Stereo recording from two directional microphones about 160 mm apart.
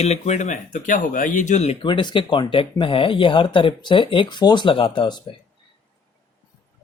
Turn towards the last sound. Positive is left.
turn(degrees=30)  # may be behind; listen again after turning